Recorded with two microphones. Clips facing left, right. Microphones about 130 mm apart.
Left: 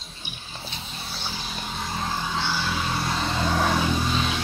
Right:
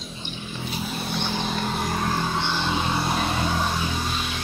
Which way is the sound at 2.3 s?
20° right (ahead or behind).